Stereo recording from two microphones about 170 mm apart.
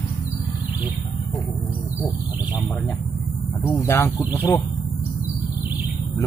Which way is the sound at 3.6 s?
15° left (ahead or behind).